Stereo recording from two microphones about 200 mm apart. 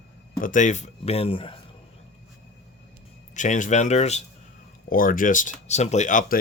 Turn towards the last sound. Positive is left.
turn(degrees=40)  # may be behind; listen again after turning